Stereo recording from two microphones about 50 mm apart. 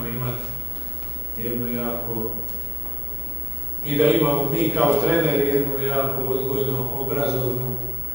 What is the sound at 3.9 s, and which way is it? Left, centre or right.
A man's voice, centre.